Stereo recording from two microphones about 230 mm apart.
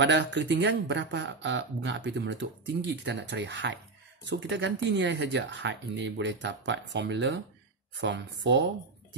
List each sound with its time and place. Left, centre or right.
0.0 s speech: right